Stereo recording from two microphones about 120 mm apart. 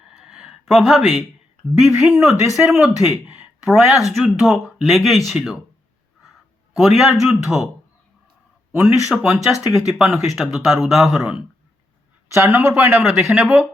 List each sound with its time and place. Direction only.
0.1 s a sound: 5° right (ahead or behind)
1.8 s speech: 5° right (ahead or behind)
6.7 s speech: centre (ahead or behind)
9.0 s speech: 5° right (ahead or behind)
12.3 s speech: 25° right (ahead or behind)
13.1 s speech: centre (ahead or behind)